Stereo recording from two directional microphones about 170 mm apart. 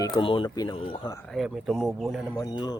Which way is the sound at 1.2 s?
Centre (ahead or behind).